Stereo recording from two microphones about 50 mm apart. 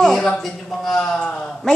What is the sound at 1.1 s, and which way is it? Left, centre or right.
Speech, left.